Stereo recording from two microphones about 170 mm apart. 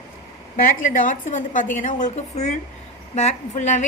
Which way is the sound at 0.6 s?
50° left (ahead or behind).